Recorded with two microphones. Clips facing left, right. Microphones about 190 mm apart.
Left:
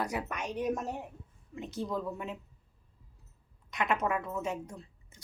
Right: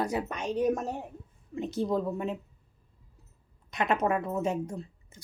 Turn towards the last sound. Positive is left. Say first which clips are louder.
# right 6 dB
turn(degrees=-30)  # may be behind; listen again after turning